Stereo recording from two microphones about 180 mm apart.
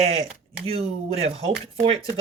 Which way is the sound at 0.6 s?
30° right (ahead or behind).